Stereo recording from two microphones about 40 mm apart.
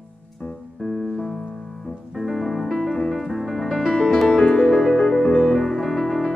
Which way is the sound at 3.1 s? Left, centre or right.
Centre.